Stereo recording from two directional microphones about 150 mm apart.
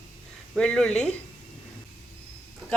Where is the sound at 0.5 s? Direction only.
5° left (ahead or behind).